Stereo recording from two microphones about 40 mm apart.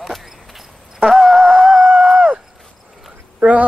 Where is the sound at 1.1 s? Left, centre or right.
Centre.